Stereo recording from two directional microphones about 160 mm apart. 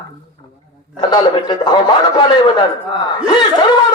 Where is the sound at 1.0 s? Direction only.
25° left (ahead or behind).